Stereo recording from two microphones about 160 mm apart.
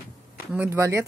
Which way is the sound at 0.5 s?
15° right (ahead or behind).